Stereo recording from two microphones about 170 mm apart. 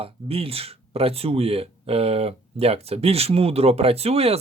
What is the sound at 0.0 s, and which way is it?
Speech, 35° right (ahead or behind).